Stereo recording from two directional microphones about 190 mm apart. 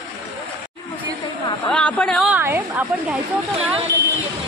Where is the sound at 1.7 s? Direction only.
5° left (ahead or behind).